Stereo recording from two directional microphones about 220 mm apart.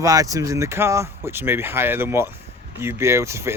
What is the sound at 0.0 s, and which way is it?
Speech, 15° right (ahead or behind).